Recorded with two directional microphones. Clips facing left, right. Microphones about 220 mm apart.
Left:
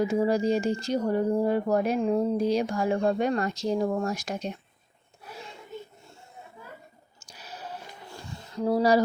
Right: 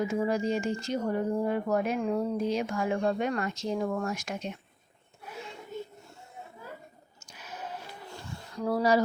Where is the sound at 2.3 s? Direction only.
35° left (ahead or behind).